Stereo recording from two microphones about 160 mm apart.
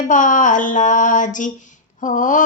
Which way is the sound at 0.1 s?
55° left (ahead or behind).